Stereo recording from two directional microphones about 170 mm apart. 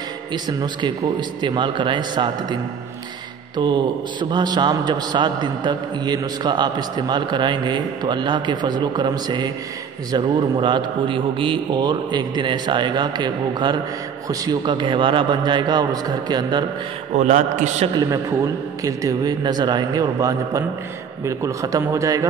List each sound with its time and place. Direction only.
0.3 s a man's voice: 25° right (ahead or behind)
17.1 s a man's voice: 45° right (ahead or behind)
17.9 s a man's voice: 20° right (ahead or behind)